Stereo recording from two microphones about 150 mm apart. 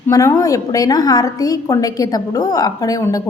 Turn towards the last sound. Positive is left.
turn(degrees=25)  # may be behind; listen again after turning